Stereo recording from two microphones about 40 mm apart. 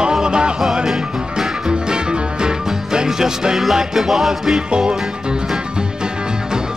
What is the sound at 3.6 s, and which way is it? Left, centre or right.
Music, centre.